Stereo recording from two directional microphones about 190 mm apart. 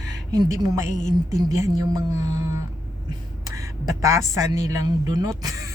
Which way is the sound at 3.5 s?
15° right (ahead or behind).